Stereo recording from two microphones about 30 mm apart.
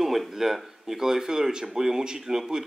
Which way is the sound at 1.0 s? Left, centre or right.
Centre.